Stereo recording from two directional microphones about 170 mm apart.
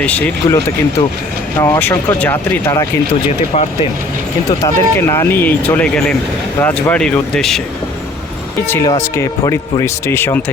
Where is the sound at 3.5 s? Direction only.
45° left (ahead or behind).